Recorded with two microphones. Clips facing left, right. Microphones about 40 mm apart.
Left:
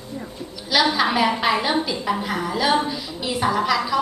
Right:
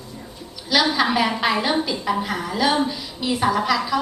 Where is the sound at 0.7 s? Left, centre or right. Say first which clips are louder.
Even; centre.